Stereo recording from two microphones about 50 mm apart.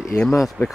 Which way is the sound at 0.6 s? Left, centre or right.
Left.